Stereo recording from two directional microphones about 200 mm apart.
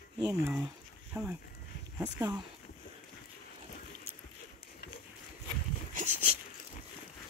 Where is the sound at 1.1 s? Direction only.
10° right (ahead or behind).